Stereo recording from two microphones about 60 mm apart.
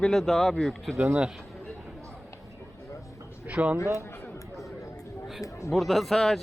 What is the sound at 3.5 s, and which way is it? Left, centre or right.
Speech, right.